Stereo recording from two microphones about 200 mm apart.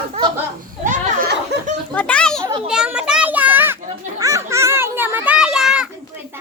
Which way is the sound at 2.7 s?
5° right (ahead or behind).